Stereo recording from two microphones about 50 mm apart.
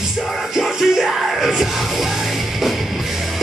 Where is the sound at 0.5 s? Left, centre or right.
Centre.